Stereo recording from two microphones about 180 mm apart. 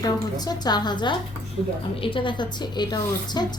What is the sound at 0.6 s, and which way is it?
Speech, 25° left (ahead or behind).